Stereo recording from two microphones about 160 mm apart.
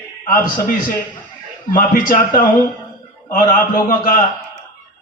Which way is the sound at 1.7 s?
55° left (ahead or behind).